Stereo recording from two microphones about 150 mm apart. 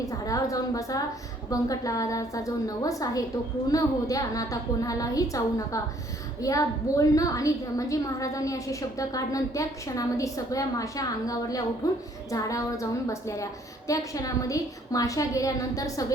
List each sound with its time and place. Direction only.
0.0 s a woman's voice: 25° left (ahead or behind)